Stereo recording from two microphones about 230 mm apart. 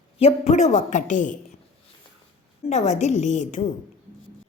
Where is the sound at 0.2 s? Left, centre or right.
Left.